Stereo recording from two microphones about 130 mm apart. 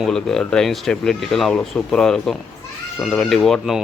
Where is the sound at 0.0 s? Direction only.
5° left (ahead or behind).